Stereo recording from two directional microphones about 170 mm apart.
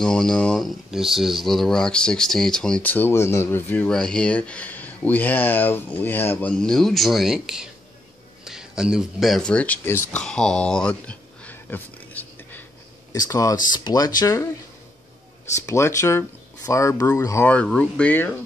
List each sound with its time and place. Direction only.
0.0 s speech: 5° left (ahead or behind)
15.6 s speech: 15° left (ahead or behind)